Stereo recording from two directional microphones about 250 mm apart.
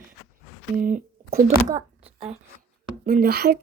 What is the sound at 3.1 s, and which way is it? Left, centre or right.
Speech, right.